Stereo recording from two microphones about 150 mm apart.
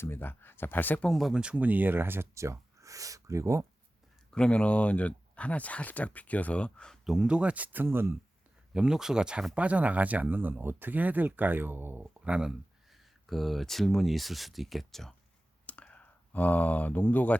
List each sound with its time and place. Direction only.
0.0 s speech: 15° left (ahead or behind); by 3.7 s 20° right (ahead or behind)
4.3 s speech: 5° left (ahead or behind); by 8.1 s 15° right (ahead or behind)
8.7 s speech: 5° right (ahead or behind)
15.6 s clicking: 10° left (ahead or behind)